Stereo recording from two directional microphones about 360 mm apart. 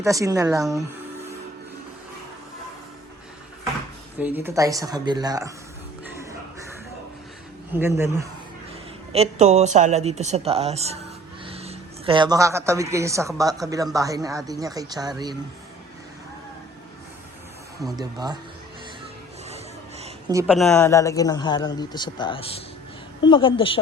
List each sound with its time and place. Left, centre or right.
0.0 s a man's voice: centre
4.2 s a man's voice: centre
7.7 s a man's voice: centre
9.1 s a man's voice: centre
20.0 s speech: centre